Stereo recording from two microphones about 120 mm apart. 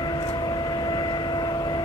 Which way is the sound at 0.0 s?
35° left (ahead or behind).